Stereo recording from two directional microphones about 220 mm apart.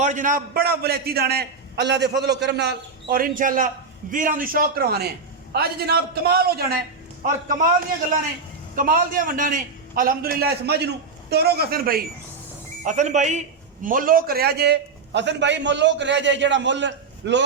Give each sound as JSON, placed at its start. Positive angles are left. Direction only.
{"t": 0.0, "sound": "a man's voice", "side_deg": -35}
{"t": 8.7, "sound": "a man's voice", "side_deg": -40}